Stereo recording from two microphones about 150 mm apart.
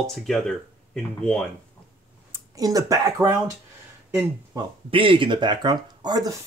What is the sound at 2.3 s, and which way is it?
Speech, 25° right (ahead or behind).